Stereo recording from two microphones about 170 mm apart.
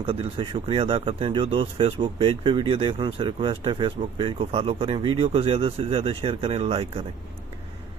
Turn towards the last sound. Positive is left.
turn(degrees=-35)  # may be behind; listen again after turning